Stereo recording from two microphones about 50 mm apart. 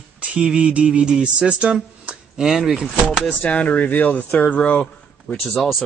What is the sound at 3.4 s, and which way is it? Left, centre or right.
Speech, left.